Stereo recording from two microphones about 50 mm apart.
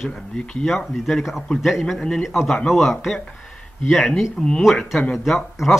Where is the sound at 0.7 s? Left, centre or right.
Centre.